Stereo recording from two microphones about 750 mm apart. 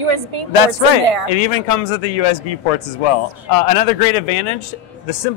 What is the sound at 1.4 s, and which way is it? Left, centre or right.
Speech, left.